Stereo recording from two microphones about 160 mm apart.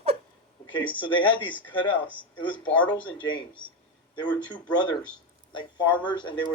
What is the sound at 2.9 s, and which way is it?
Speech, 30° left (ahead or behind).